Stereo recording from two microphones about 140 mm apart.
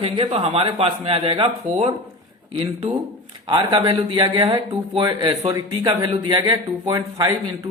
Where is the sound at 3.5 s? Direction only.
35° right (ahead or behind).